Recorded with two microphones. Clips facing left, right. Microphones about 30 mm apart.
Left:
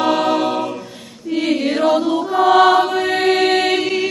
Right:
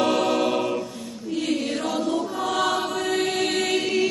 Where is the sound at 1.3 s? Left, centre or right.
Left.